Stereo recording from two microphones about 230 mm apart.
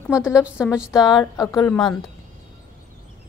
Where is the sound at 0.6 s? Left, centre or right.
Centre.